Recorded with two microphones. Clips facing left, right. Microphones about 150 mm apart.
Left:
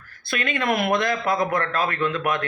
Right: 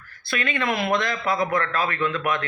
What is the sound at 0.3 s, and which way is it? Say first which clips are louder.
Speech: left 1 dB; 45° left (ahead or behind).